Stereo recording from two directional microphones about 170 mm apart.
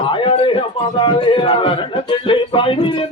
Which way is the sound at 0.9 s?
30° left (ahead or behind).